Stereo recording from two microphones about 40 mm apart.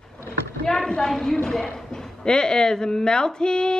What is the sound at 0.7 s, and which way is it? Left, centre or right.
A woman's voice, centre.